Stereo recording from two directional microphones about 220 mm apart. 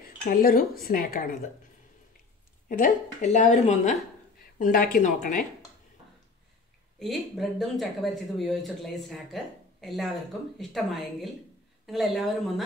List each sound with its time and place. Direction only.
0.3 s a woman's voice: 40° left (ahead or behind)
2.7 s a woman's voice: 35° left (ahead or behind)
7.0 s speech: centre (ahead or behind)